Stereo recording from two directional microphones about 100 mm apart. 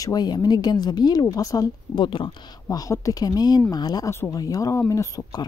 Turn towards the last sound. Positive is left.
turn(degrees=35)  # may be behind; listen again after turning